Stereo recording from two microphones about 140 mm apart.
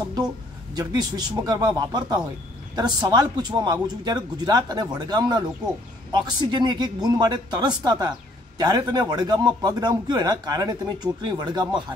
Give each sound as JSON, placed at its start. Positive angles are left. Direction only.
{"t": 0.7, "sound": "a man's voice", "side_deg": -30}